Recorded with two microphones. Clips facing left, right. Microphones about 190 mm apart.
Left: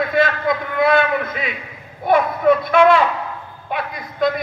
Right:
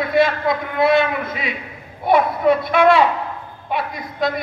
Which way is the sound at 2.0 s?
50° left (ahead or behind).